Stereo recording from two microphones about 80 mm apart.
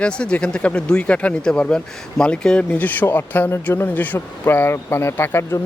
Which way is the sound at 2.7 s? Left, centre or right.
Left.